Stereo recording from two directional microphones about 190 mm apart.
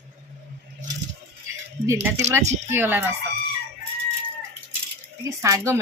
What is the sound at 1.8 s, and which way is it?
Speech, 15° right (ahead or behind).